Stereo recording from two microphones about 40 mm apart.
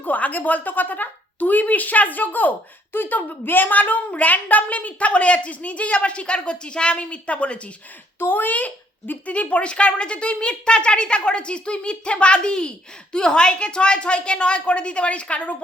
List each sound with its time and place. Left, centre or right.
0.0 s speech: left
8.2 s a child's voice: left